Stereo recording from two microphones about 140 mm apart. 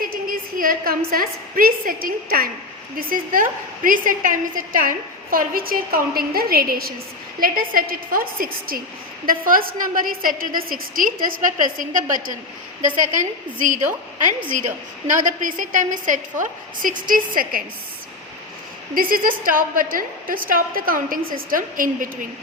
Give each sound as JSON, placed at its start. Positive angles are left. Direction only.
{"t": 0.0, "sound": "a woman's voice", "side_deg": -90}
{"t": 15.0, "sound": "a woman's voice", "side_deg": -65}
{"t": 18.9, "sound": "a woman's voice", "side_deg": -90}